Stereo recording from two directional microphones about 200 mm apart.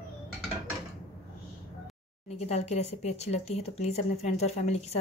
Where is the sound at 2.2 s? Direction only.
30° left (ahead or behind).